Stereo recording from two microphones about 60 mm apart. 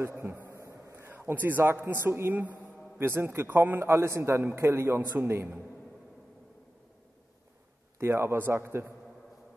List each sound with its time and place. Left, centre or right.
0.0 s a man's voice: right
8.0 s a man's voice: right